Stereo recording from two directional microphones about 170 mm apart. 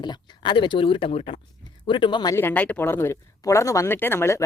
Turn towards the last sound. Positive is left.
turn(degrees=15)  # may be behind; listen again after turning